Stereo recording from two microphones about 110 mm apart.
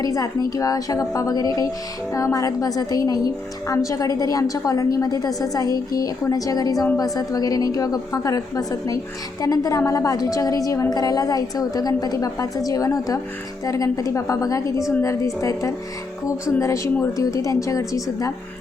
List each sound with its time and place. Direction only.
0.0 s a woman's voice: 30° left (ahead or behind)